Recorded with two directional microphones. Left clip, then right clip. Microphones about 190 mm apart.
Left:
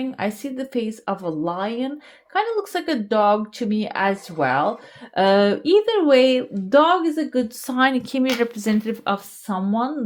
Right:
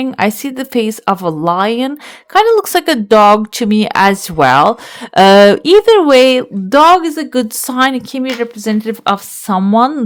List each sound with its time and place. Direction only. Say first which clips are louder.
0.0 s speech: right 11 dB; 50° right (ahead or behind)
7.7 s speech: right 6 dB; 25° right (ahead or behind)
8.9 s speech: right 9 dB; 40° right (ahead or behind)